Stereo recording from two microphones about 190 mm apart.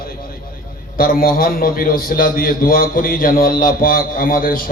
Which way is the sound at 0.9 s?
50° left (ahead or behind).